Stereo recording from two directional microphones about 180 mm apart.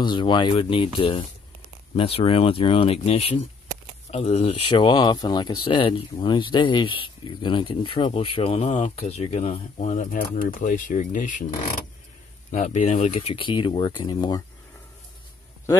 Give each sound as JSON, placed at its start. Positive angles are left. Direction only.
{"t": 0.0, "sound": "speech", "side_deg": 25}